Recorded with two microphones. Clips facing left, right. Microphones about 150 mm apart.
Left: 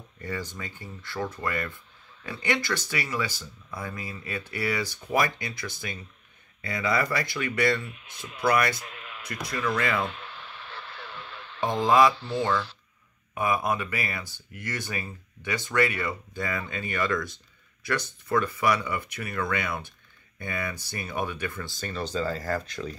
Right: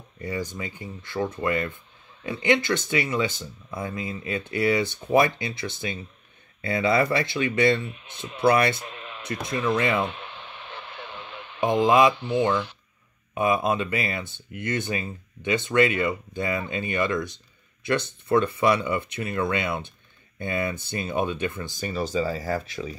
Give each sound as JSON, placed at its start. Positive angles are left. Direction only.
{"t": 0.2, "sound": "speech", "side_deg": -15}